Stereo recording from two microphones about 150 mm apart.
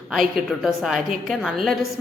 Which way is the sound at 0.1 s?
Centre (ahead or behind).